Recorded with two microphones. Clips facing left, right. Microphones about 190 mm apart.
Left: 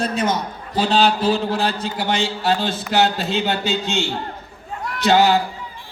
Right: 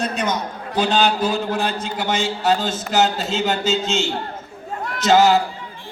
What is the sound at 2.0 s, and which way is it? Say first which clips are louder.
A man's voice: right 1 dB; 45° right (ahead or behind).